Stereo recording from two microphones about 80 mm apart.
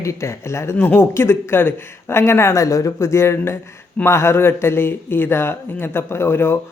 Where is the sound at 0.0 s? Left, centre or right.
Left.